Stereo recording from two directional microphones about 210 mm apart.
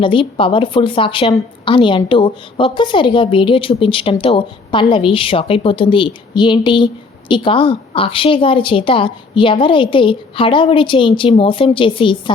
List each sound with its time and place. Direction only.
0.0 s a woman's voice: 25° left (ahead or behind)